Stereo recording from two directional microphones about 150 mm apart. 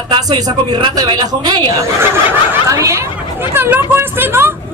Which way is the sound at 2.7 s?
20° right (ahead or behind).